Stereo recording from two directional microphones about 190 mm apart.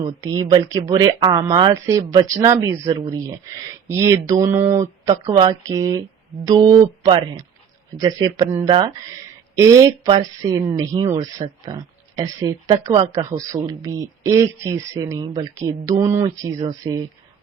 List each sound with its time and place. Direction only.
0.3 s speech: 20° right (ahead or behind)